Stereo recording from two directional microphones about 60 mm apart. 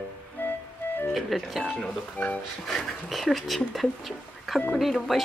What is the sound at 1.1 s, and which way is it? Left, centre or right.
Speech, centre.